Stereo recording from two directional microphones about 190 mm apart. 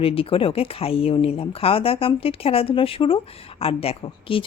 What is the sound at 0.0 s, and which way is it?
Speech, 30° left (ahead or behind).